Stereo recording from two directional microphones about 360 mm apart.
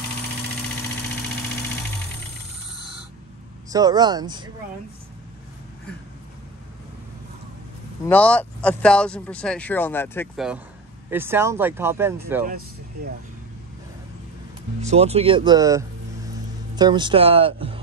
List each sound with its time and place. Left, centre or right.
3.7 s speech: centre
8.1 s speech: centre
12.4 s speech: right
14.8 s speech: centre